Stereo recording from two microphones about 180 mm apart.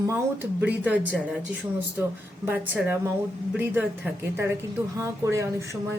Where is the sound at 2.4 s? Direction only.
10° right (ahead or behind).